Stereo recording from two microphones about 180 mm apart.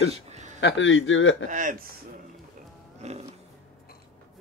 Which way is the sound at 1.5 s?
45° right (ahead or behind).